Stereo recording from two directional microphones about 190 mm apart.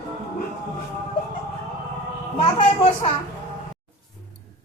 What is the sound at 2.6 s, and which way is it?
Speech, 30° left (ahead or behind).